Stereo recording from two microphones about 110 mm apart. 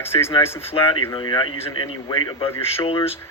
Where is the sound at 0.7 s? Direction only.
60° left (ahead or behind).